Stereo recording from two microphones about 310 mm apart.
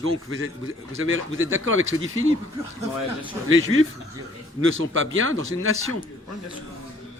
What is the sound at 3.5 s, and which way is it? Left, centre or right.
Speech, right.